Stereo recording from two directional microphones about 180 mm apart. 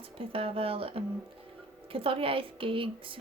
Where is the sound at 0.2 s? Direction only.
30° right (ahead or behind).